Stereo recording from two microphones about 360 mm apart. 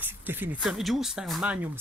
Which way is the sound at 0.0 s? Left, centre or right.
Centre.